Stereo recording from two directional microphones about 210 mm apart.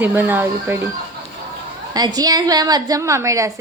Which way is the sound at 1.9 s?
20° right (ahead or behind).